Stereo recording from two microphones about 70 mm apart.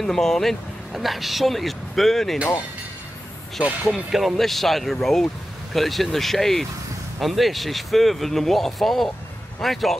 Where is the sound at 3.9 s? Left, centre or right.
Centre.